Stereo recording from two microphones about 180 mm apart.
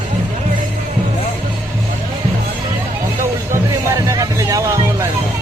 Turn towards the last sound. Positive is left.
turn(degrees=-20)  # may be behind; listen again after turning